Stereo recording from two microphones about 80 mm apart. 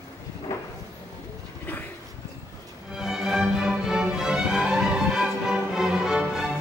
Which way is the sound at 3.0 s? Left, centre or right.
Centre.